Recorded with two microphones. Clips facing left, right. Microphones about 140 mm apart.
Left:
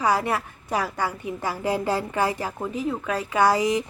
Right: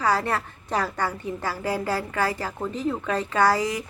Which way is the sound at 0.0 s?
15° left (ahead or behind).